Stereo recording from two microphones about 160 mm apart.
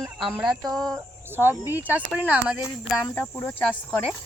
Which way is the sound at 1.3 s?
15° right (ahead or behind).